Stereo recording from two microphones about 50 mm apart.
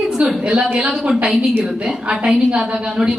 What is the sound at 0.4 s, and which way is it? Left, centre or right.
A woman's voice, right.